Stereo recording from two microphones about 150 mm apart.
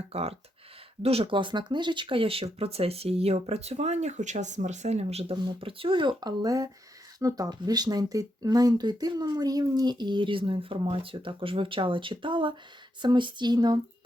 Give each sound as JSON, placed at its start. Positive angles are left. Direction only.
{"t": 0.1, "sound": "speech", "side_deg": -40}